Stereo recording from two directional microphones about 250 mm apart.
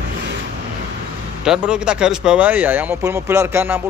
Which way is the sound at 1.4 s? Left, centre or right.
Centre.